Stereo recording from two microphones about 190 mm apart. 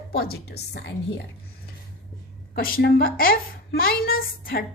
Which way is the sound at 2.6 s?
55° left (ahead or behind).